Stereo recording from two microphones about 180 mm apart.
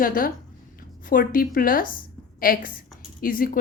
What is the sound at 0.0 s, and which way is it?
Speech, 50° left (ahead or behind).